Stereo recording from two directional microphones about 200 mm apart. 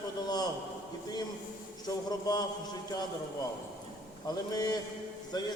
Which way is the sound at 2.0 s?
20° left (ahead or behind).